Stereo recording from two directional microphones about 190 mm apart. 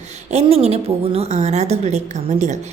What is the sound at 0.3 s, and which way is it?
A woman's voice, 35° right (ahead or behind).